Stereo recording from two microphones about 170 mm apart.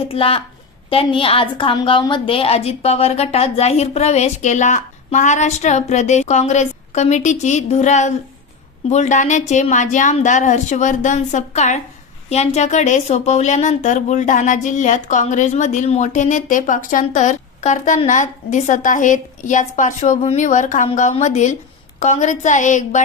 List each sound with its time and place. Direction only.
0.1 s a woman's voice: 35° left (ahead or behind)